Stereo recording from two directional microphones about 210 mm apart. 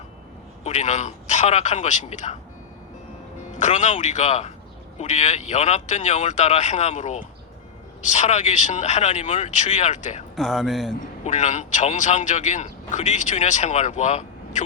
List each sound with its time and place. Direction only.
0.6 s speech: 35° left (ahead or behind)
3.6 s speech: 35° left (ahead or behind)
10.3 s speech: centre (ahead or behind)
11.3 s speech: 35° left (ahead or behind)